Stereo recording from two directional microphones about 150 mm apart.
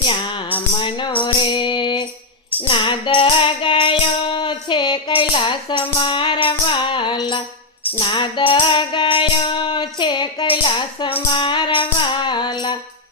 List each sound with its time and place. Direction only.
0.0 s music: 35° left (ahead or behind)